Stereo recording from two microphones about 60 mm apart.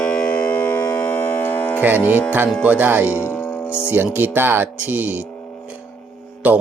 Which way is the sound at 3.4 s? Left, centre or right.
Left.